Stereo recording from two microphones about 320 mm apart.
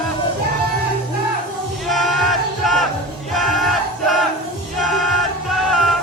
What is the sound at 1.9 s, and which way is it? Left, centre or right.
Crowd, centre.